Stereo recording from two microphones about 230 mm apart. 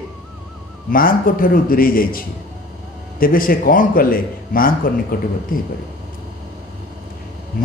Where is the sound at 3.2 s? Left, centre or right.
Left.